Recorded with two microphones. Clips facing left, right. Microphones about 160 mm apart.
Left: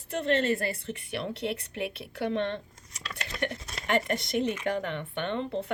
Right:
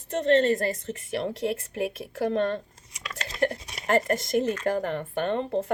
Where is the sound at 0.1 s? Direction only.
35° right (ahead or behind).